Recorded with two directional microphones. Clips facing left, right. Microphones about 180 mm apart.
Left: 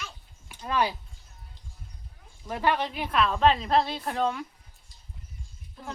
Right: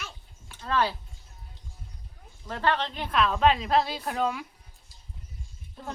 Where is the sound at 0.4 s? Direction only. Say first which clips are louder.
Even; 15° left (ahead or behind).